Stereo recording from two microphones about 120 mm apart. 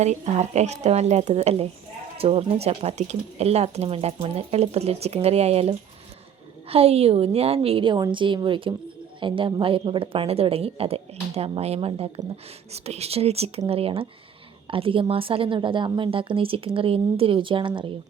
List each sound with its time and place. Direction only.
0.0 s a woman's voice: 70° right (ahead or behind); by 17.9 s 45° right (ahead or behind)